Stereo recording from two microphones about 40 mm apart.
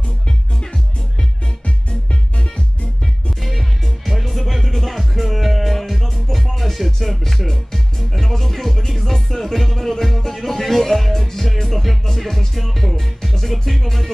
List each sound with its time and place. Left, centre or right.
1.9 s music: left
3.4 s music: centre